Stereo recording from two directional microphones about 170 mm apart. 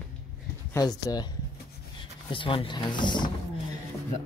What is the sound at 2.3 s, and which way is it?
Speech, 30° left (ahead or behind).